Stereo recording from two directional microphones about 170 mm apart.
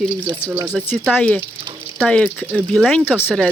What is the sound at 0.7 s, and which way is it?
Speech, 5° left (ahead or behind).